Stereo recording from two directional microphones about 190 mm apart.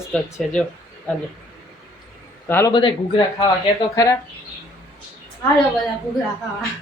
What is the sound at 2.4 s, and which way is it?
Speech, 10° left (ahead or behind).